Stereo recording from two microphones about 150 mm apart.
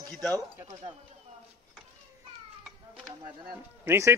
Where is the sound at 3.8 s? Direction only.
15° right (ahead or behind).